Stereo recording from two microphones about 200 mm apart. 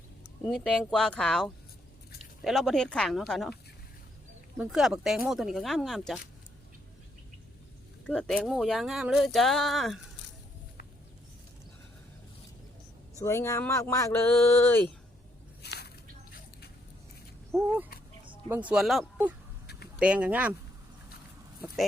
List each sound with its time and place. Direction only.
0.4 s speech: 5° left (ahead or behind)
4.5 s speech: 5° right (ahead or behind)
8.0 s speech: 5° left (ahead or behind)
13.1 s speech: 15° left (ahead or behind)
15.6 s a sound: 55° left (ahead or behind)
17.5 s speech: 10° right (ahead or behind)